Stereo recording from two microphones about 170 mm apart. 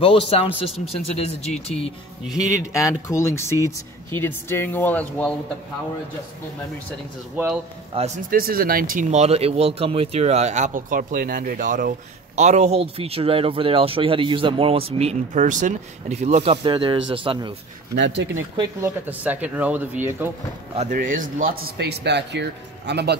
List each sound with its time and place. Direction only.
0.0 s speech: 35° left (ahead or behind)
2.2 s speech: 20° left (ahead or behind)
8.3 s speech: 60° right (ahead or behind); by 16.5 s 40° right (ahead or behind)
16.6 s speech: 30° right (ahead or behind)
17.9 s speech: 90° right
19.0 s speech: 10° right (ahead or behind)
20.7 s a man's voice: 45° right (ahead or behind); by 23.1 s 80° right